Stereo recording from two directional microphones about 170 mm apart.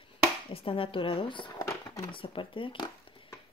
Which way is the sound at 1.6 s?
20° left (ahead or behind).